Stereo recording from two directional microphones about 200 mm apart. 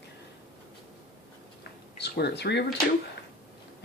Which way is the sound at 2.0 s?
55° left (ahead or behind).